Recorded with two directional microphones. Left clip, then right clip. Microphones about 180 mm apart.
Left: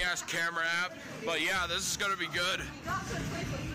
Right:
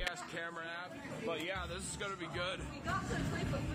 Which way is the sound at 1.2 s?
30° left (ahead or behind).